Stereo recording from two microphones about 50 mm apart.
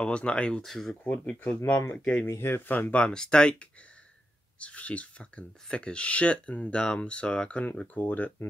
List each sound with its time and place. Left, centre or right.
0.0 s speech: left
0.7 s speech: centre
1.0 s speech: left
2.2 s speech: left
2.7 s speech: left
3.1 s speech: centre
4.6 s speech: left
7.8 s speech: left